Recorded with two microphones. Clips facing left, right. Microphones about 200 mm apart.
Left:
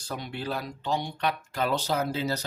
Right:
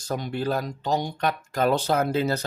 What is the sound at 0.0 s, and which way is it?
Speech, 45° right (ahead or behind).